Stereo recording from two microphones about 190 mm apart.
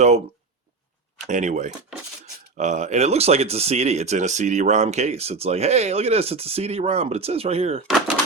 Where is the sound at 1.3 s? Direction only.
40° right (ahead or behind).